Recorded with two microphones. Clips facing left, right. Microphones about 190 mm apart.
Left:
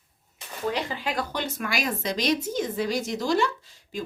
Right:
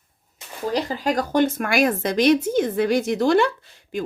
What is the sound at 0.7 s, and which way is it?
Speech, 40° right (ahead or behind).